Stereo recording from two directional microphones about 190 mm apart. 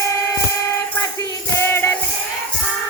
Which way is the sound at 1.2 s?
10° left (ahead or behind).